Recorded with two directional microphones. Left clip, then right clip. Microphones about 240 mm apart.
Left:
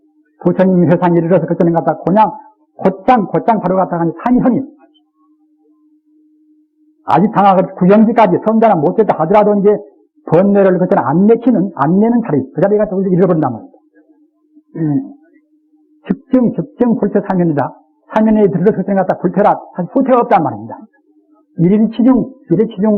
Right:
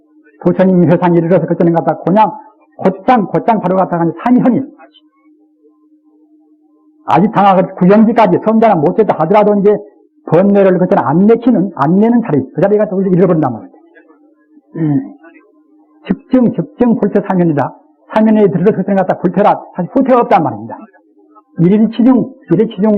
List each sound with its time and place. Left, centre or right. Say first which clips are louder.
0.3 s a man's voice: right 1 dB; left
7.0 s a man's voice: right 1 dB; left
14.7 s a sound: right 2 dB; left
16.3 s a man's voice: right 2 dB; left